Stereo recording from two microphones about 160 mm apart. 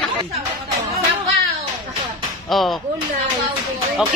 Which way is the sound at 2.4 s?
Centre (ahead or behind).